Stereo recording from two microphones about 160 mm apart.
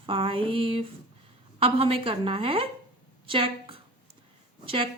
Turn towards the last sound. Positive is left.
turn(degrees=-35)  # may be behind; listen again after turning